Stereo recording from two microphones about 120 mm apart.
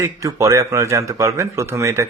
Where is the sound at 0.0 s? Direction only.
25° right (ahead or behind).